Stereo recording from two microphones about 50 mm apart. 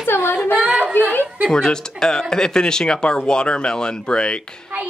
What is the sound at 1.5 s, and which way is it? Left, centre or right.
Speech, centre.